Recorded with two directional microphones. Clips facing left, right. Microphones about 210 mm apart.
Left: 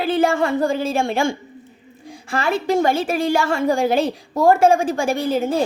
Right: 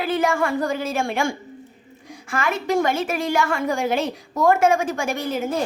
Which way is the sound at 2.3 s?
30° left (ahead or behind).